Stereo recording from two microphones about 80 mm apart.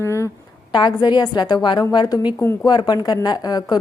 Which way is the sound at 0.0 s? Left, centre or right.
Left.